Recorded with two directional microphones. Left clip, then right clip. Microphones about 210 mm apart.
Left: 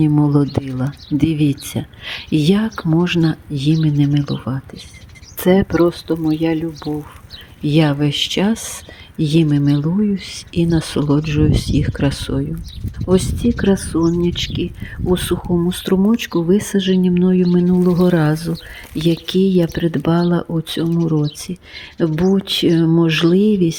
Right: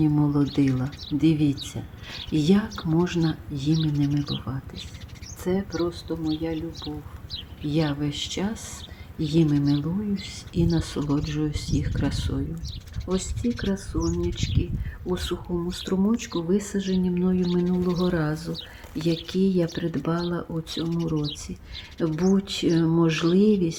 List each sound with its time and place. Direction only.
0.0 s speech: 40° left (ahead or behind)
7.7 s speech: 40° left (ahead or behind)